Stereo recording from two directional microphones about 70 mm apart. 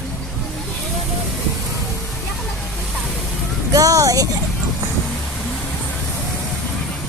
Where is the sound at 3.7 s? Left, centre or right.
Right.